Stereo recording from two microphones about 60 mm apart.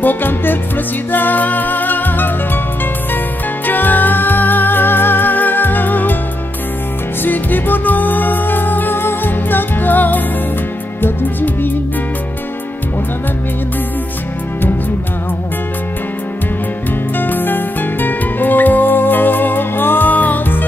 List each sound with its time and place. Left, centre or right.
0.0 s music: left
3.6 s music: left
7.2 s music: left
17.2 s music: left